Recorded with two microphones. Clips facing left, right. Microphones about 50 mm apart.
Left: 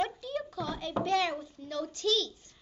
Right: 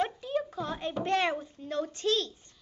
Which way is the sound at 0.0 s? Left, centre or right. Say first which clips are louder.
Right 2 dB; right.